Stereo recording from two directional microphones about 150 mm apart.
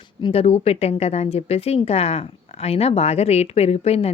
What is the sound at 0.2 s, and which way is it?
A woman's voice, 40° left (ahead or behind).